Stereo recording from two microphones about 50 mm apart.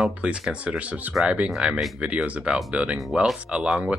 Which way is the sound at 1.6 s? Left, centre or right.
Centre.